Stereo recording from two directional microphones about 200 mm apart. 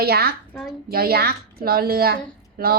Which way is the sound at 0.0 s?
50° right (ahead or behind).